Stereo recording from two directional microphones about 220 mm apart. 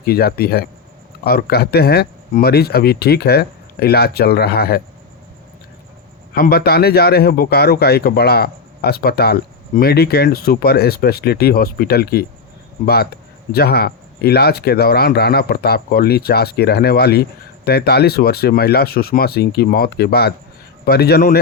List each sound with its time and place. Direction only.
0.0 s speech: 45° left (ahead or behind)
6.3 s speech: 45° left (ahead or behind)